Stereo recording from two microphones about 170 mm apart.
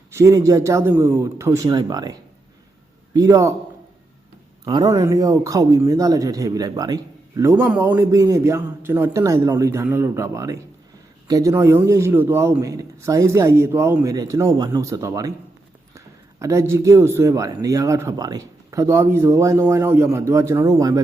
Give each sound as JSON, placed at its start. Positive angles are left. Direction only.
{"t": 0.1, "sound": "a man's voice", "side_deg": -20}
{"t": 4.6, "sound": "speech", "side_deg": -25}
{"t": 7.5, "sound": "a man's voice", "side_deg": -10}